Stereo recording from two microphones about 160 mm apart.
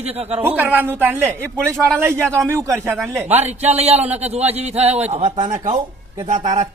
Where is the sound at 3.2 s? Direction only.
45° right (ahead or behind).